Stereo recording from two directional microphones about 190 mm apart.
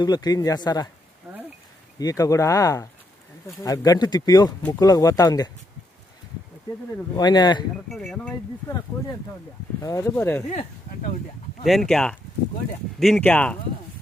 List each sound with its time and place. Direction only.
0.0 s speech: 20° left (ahead or behind)
1.3 s a sound: 10° right (ahead or behind)
2.0 s speech: 20° left (ahead or behind)
7.2 s speech: 20° left (ahead or behind)
7.9 s speech: centre (ahead or behind)
10.5 s speech: 35° left (ahead or behind)
11.6 s speech: centre (ahead or behind)